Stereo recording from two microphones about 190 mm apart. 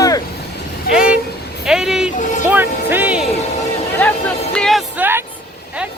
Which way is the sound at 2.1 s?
40° left (ahead or behind).